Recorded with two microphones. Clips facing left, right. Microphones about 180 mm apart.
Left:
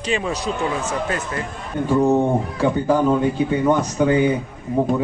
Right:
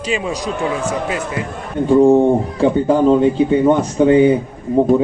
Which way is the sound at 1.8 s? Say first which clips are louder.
Right 7 dB; 25° right (ahead or behind).